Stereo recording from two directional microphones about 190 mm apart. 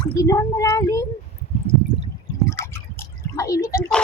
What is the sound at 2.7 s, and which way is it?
Drip, 15° left (ahead or behind).